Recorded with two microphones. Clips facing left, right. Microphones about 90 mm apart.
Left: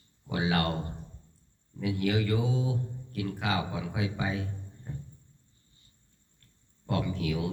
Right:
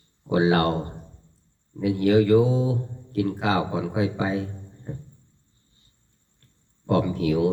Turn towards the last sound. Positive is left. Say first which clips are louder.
# right 9 dB
turn(degrees=-35)  # may be behind; listen again after turning